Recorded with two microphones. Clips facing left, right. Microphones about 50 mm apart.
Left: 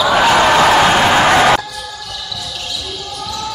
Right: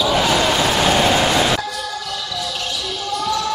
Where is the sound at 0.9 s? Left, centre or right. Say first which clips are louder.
Left 5 dB; left.